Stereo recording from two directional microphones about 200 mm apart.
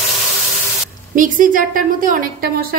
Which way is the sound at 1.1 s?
40° right (ahead or behind).